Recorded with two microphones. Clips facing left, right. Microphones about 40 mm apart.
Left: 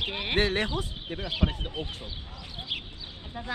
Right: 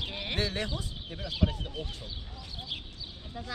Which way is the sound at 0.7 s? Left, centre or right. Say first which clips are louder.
Left 5 dB; left.